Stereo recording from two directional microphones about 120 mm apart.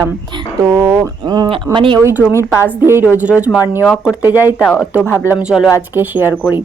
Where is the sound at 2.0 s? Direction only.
15° right (ahead or behind).